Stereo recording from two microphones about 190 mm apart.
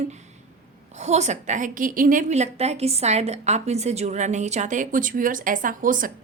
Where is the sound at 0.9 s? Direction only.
35° right (ahead or behind).